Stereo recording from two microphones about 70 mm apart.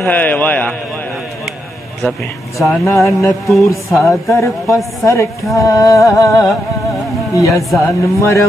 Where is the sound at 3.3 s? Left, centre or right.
Centre.